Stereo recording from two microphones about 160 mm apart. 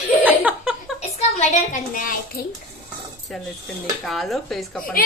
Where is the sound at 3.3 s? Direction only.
Centre (ahead or behind).